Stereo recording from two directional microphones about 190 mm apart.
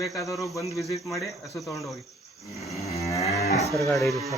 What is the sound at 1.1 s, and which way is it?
Speech, centre (ahead or behind).